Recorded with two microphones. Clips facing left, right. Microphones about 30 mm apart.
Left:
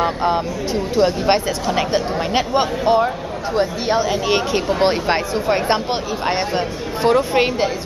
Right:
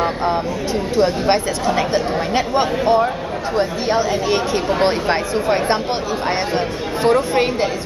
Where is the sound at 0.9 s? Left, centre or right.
Centre.